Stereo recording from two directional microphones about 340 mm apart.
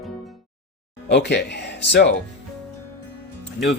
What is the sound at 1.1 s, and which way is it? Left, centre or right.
Speech, left.